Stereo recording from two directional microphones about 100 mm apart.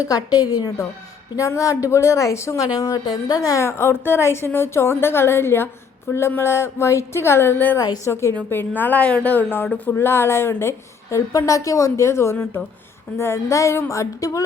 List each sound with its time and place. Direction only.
0.0 s a woman's voice: 40° left (ahead or behind); by 7.8 s 20° left (ahead or behind)
7.8 s speech: 35° left (ahead or behind)
8.4 s a woman's voice: 20° left (ahead or behind)